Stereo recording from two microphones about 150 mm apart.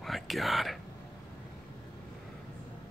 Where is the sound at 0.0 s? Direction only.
Centre (ahead or behind).